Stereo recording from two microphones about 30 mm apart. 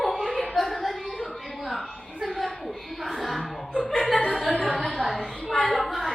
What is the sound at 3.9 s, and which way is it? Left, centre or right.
Chuckle, centre.